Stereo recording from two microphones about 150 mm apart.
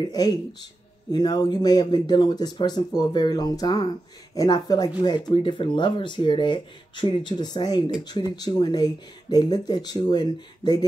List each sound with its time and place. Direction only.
0.0 s speech: 25° left (ahead or behind)